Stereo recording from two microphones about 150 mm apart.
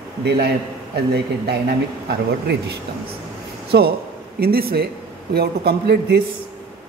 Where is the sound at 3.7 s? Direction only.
90° right.